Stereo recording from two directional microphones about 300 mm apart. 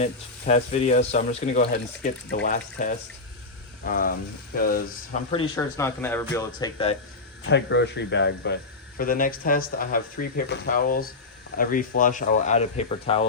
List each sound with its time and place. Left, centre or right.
0.0 s speech: left
5.3 s speech: centre
7.4 s speech: left